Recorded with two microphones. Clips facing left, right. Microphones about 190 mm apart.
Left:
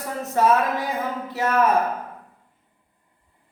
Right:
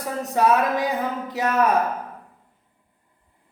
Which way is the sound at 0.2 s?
15° right (ahead or behind).